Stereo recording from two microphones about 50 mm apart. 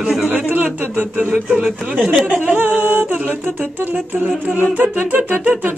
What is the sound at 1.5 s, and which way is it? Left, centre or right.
Speech, right.